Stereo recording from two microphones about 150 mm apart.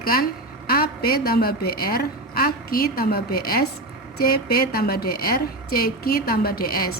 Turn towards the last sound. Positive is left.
turn(degrees=80)